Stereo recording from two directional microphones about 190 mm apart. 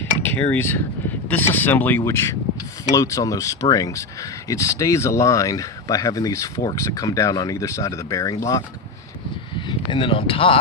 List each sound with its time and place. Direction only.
0.2 s cutlery: 10° left (ahead or behind)
0.5 s speech: 10° left (ahead or behind); by 10.6 s 30° left (ahead or behind)